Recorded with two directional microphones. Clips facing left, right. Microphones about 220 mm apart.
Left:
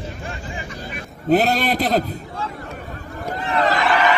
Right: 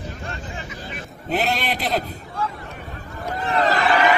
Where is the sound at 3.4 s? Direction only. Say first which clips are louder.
Even; 35° right (ahead or behind).